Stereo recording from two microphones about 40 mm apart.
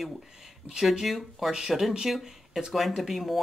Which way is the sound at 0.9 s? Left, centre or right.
Centre.